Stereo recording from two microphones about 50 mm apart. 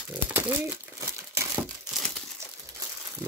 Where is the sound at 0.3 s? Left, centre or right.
Right.